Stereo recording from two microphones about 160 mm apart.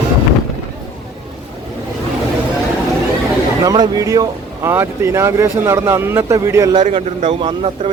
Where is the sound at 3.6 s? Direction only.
25° right (ahead or behind).